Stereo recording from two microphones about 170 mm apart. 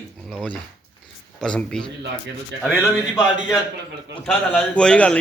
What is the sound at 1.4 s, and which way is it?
Speech, 5° left (ahead or behind).